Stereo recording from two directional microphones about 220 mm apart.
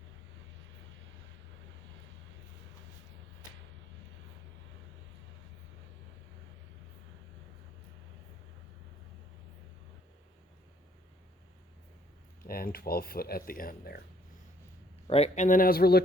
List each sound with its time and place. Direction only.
12.5 s speech: 40° left (ahead or behind)
15.0 s speech: 30° left (ahead or behind); by 16.0 s 45° left (ahead or behind)